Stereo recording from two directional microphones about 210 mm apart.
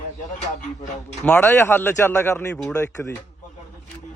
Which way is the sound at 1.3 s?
10° left (ahead or behind).